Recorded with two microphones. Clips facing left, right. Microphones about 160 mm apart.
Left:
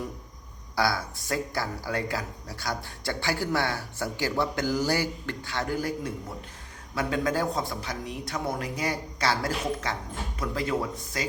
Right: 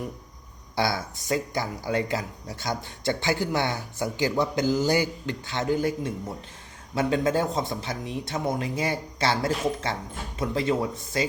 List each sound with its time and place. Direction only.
0.8 s speech: 20° right (ahead or behind)